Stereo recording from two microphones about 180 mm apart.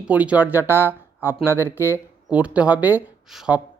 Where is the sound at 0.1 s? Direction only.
10° right (ahead or behind).